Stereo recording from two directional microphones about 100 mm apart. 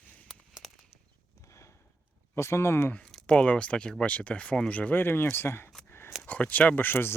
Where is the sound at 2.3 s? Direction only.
25° left (ahead or behind).